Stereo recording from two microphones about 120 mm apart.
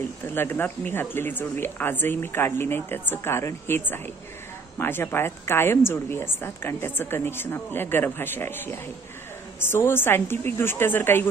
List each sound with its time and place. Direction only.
0.2 s a woman's voice: 20° left (ahead or behind)